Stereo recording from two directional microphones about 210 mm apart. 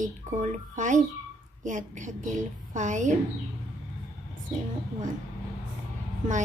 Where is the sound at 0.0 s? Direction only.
35° right (ahead or behind).